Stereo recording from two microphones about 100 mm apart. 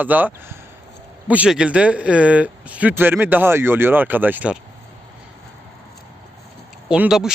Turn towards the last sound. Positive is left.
turn(degrees=-10)  # may be behind; listen again after turning